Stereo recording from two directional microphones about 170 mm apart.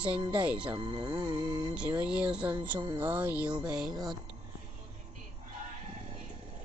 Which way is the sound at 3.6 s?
5° right (ahead or behind).